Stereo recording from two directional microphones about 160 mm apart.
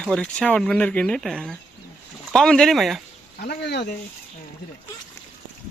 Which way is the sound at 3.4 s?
85° left.